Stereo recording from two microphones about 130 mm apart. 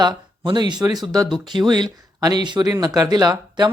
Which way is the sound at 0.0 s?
35° right (ahead or behind).